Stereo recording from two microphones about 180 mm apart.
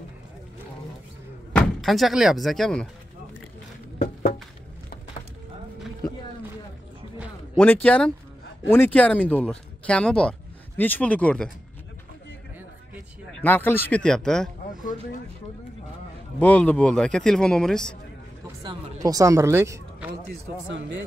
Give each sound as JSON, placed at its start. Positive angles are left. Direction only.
{"t": 1.5, "sound": "speech", "side_deg": 0}
{"t": 4.0, "sound": "a sound", "side_deg": 50}
{"t": 7.5, "sound": "speech", "side_deg": 10}
{"t": 13.4, "sound": "speech", "side_deg": 10}
{"t": 16.3, "sound": "a man's voice", "side_deg": 10}
{"t": 18.6, "sound": "a sound", "side_deg": -25}